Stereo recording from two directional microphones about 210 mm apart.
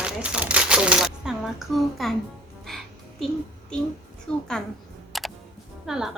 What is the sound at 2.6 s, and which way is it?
Music, centre (ahead or behind).